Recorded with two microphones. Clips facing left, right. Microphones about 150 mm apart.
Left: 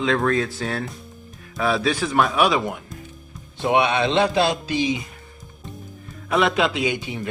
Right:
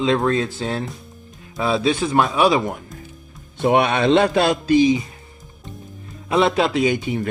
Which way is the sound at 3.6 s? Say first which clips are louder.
Right 2 dB; 50° right (ahead or behind).